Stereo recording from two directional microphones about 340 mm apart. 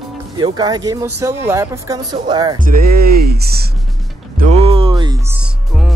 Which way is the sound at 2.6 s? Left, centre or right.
Right.